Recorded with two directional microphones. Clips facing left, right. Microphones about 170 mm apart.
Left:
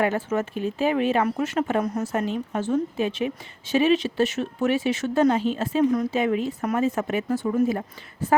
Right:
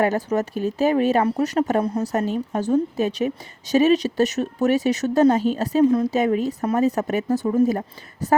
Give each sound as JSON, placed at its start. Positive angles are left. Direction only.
{"t": 0.0, "sound": "speech", "side_deg": -40}